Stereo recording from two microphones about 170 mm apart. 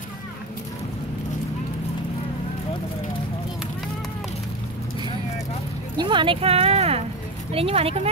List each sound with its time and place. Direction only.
5.9 s speech: 25° right (ahead or behind)